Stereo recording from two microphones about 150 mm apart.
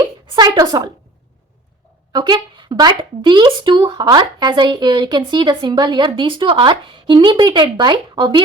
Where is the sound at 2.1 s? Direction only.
30° right (ahead or behind).